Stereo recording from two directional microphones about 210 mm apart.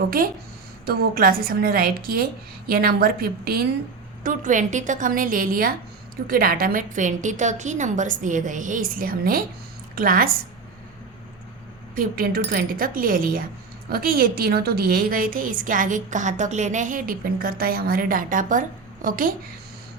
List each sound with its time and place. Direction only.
0.9 s a woman's voice: 45° right (ahead or behind)
11.9 s a woman's voice: 45° right (ahead or behind)